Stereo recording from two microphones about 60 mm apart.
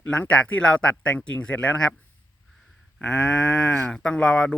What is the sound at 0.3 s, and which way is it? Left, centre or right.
Speech, left.